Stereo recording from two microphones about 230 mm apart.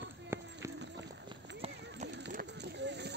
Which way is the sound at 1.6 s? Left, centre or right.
Right.